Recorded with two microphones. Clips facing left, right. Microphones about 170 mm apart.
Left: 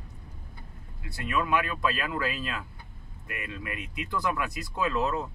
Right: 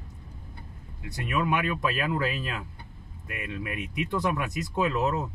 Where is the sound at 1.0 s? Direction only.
20° right (ahead or behind).